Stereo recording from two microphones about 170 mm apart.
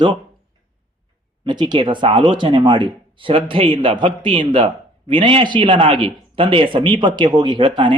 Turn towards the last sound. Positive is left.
turn(degrees=-30)  # may be behind; listen again after turning